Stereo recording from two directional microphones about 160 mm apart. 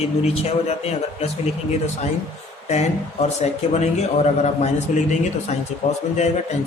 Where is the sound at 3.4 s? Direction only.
45° left (ahead or behind).